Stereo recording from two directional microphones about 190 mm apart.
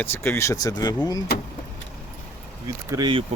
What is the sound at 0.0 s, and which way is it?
Speech, 10° left (ahead or behind).